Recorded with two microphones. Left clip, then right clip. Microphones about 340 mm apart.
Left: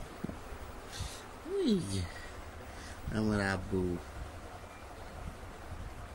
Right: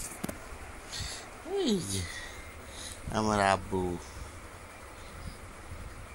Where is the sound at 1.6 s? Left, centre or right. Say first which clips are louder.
Right 2 dB; centre.